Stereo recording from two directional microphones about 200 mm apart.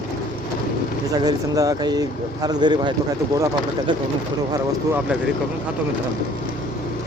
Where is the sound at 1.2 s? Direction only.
20° right (ahead or behind).